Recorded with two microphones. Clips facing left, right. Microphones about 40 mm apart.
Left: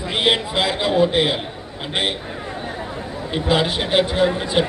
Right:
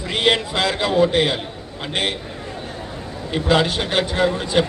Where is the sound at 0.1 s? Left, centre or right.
Centre.